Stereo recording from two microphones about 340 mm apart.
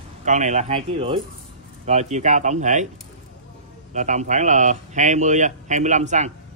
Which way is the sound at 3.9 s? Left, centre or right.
Right.